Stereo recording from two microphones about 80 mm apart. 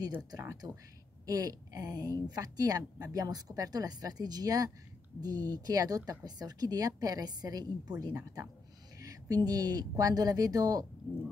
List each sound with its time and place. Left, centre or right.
0.3 s a woman's voice: right
8.1 s speech: right
9.0 s a woman's voice: right